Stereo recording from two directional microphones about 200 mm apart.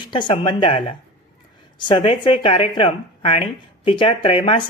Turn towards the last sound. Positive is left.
turn(degrees=25)  # may be behind; listen again after turning